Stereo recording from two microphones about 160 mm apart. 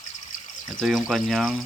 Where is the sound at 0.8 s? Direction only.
Centre (ahead or behind).